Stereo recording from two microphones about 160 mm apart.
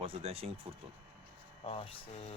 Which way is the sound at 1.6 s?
40° left (ahead or behind).